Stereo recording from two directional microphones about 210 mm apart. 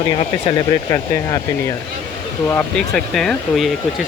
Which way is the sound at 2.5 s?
5° left (ahead or behind).